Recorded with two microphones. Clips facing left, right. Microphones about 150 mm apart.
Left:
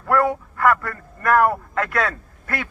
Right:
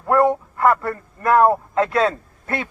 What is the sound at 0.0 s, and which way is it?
Speech, 20° right (ahead or behind).